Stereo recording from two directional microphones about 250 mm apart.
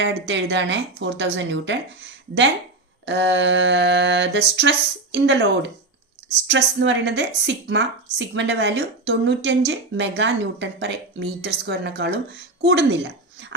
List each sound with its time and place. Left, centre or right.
0.0 s a woman's voice: right